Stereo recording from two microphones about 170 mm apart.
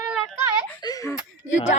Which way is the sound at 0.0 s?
Centre (ahead or behind).